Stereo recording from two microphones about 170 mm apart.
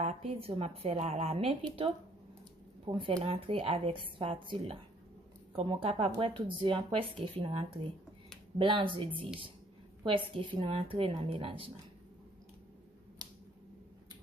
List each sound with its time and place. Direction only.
0.0 s a woman's voice: 35° right (ahead or behind)
13.2 s finger snapping: 25° right (ahead or behind)